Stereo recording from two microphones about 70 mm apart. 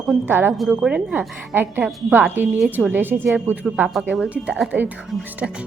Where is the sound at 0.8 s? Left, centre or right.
Centre.